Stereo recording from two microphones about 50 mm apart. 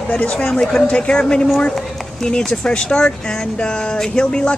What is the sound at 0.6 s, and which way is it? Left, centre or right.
Speech, centre.